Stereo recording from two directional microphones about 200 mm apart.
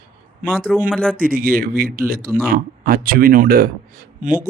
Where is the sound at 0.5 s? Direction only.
Centre (ahead or behind).